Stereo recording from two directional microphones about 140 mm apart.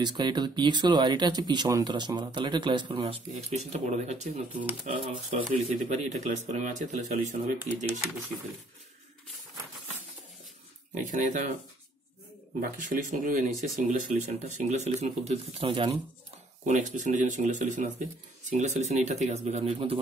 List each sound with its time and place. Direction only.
0.0 s speech: 30° right (ahead or behind); by 8.0 s 60° right (ahead or behind)
11.0 s speech: 65° right (ahead or behind)
12.5 s speech: 70° right (ahead or behind); by 15.9 s 40° right (ahead or behind)
16.6 s speech: 60° right (ahead or behind)